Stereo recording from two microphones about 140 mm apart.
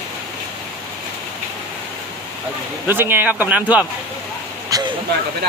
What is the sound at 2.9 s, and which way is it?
Speech, 15° right (ahead or behind).